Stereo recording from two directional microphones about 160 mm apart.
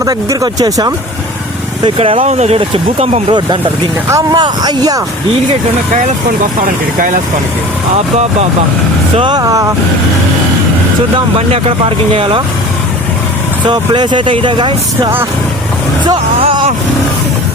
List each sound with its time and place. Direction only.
0.0 s speech: 20° right (ahead or behind)
6.6 s speech: 60° right (ahead or behind)
9.1 s speech: 30° right (ahead or behind)
11.3 s speech: 35° right (ahead or behind)
13.7 s speech: 30° right (ahead or behind)
16.4 s vehicle: 35° right (ahead or behind)